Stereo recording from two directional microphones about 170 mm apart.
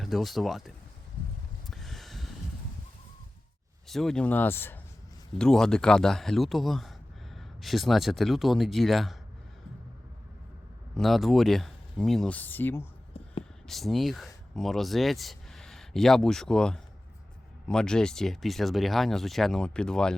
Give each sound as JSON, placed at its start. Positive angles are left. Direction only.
{"t": 0.0, "sound": "speech", "side_deg": 0}
{"t": 1.7, "sound": "snort", "side_deg": 0}
{"t": 3.8, "sound": "speech", "side_deg": 0}
{"t": 10.9, "sound": "speech", "side_deg": 0}
{"t": 13.2, "sound": "a sound", "side_deg": 35}
{"t": 13.7, "sound": "speech", "side_deg": 0}